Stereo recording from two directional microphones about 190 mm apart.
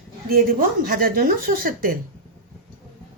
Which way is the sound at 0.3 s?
50° right (ahead or behind).